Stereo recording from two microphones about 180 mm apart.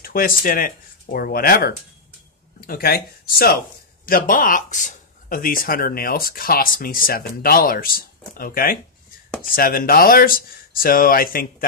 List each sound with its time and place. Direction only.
0.0 s speech: 55° left (ahead or behind)